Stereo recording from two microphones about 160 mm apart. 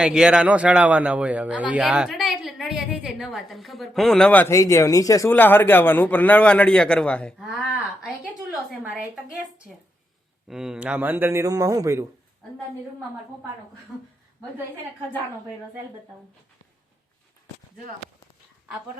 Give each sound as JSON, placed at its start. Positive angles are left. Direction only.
{"t": 0.0, "sound": "a man's voice", "side_deg": -5}
{"t": 10.5, "sound": "speech", "side_deg": -5}